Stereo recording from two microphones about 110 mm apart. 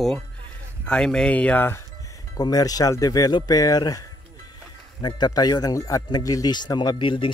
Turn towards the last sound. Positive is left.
turn(degrees=50)  # may be behind; listen again after turning